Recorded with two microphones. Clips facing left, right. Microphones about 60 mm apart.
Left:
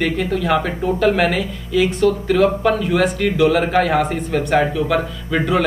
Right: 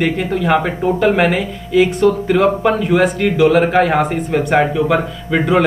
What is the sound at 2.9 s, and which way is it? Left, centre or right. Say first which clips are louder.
Speech: right 3 dB; centre.